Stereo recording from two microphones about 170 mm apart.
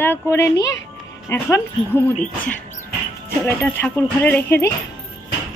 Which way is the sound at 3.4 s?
10° left (ahead or behind).